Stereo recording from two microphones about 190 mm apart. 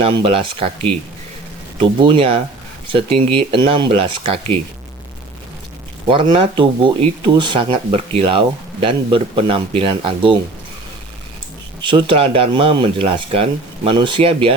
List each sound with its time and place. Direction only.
0.0 s speech: 30° right (ahead or behind)
1.8 s speech: 25° right (ahead or behind)
6.1 s speech: 25° right (ahead or behind)
11.8 s speech: 25° right (ahead or behind)